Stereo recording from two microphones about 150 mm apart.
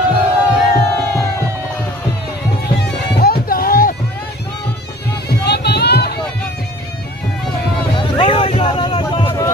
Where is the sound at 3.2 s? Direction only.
85° left.